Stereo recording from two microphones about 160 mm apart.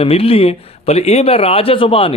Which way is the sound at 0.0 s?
35° left (ahead or behind).